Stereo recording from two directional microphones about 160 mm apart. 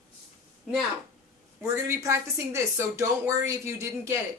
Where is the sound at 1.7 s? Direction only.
15° right (ahead or behind).